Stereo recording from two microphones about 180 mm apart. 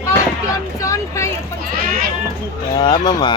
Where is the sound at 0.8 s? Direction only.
15° left (ahead or behind).